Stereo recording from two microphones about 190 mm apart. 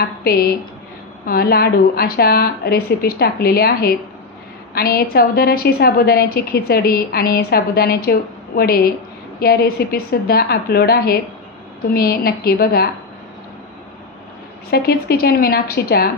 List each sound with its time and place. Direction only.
0.2 s a woman's voice: 55° left (ahead or behind)
14.7 s a woman's voice: 55° left (ahead or behind)